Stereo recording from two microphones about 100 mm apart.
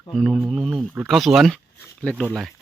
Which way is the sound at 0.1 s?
Centre (ahead or behind).